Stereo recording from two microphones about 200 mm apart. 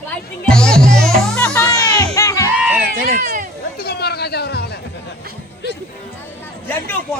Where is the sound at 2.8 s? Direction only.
45° right (ahead or behind).